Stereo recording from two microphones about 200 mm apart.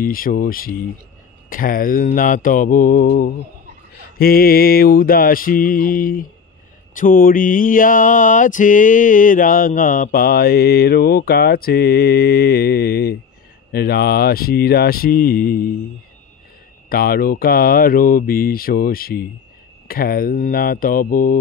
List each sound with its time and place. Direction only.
0.0 s mantra: 45° left (ahead or behind)
16.9 s mantra: 50° left (ahead or behind)